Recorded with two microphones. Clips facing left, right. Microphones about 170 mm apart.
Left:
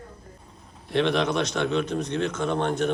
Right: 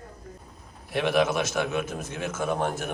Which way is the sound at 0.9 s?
5° right (ahead or behind).